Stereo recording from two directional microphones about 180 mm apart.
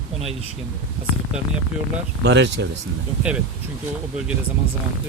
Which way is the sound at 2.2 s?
70° right (ahead or behind).